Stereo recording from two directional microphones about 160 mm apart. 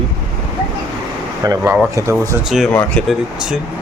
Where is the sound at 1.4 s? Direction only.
20° right (ahead or behind).